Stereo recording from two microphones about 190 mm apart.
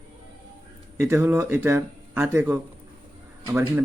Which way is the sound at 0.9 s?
15° right (ahead or behind).